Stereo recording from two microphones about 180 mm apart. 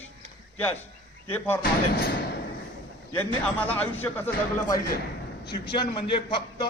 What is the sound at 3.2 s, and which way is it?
Speech, 10° left (ahead or behind).